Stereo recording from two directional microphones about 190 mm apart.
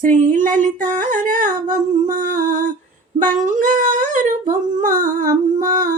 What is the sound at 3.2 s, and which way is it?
Humming, 40° right (ahead or behind).